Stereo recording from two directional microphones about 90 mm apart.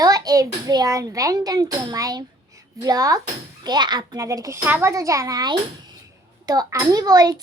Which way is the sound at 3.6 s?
50° right (ahead or behind).